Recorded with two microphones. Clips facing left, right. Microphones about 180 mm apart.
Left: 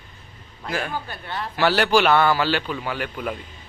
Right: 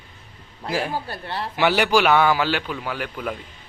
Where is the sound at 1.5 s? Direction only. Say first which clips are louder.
Even; 15° right (ahead or behind).